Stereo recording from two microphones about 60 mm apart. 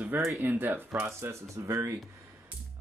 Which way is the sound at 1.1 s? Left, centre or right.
Right.